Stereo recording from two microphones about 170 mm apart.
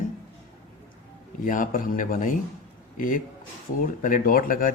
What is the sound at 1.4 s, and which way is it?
Speech, 50° left (ahead or behind).